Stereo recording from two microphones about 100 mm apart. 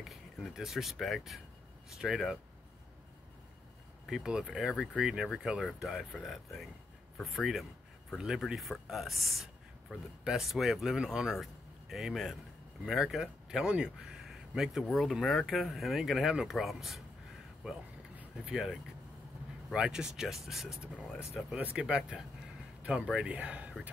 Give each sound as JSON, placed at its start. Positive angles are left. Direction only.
{"t": 0.0, "sound": "speech", "side_deg": 0}
{"t": 4.1, "sound": "speech", "side_deg": -5}
{"t": 18.1, "sound": "vehicle", "side_deg": -15}
{"t": 18.5, "sound": "speech", "side_deg": 0}